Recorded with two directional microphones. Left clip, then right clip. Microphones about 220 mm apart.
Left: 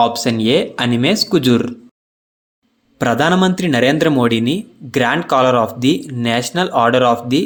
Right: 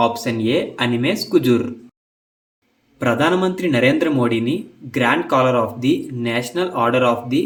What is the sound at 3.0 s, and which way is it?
Speech, 45° left (ahead or behind).